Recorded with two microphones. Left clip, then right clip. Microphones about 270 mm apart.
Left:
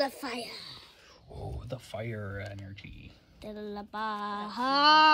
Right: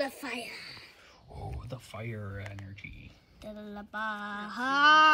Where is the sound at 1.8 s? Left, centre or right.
Centre.